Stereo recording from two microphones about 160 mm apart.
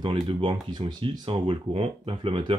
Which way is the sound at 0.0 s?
30° right (ahead or behind).